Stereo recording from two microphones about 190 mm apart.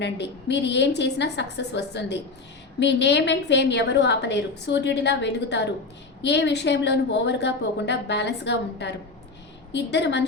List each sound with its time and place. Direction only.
0.0 s a woman's voice: 65° left (ahead or behind)